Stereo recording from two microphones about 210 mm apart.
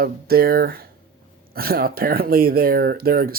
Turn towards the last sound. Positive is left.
turn(degrees=-45)  # may be behind; listen again after turning